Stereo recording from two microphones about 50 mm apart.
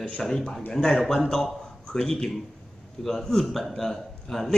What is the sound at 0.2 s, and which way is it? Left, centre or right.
A man's voice, centre.